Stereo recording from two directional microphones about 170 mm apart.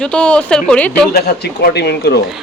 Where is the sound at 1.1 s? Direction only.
70° left (ahead or behind).